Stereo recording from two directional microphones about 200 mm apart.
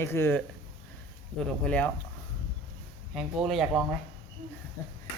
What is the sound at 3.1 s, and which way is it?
Speech, centre (ahead or behind).